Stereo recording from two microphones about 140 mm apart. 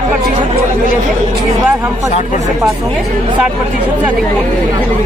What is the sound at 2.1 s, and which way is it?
Speech, 60° left (ahead or behind).